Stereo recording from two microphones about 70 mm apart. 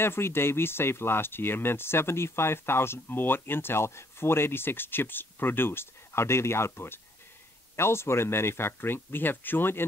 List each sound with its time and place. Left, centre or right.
0.0 s speech: left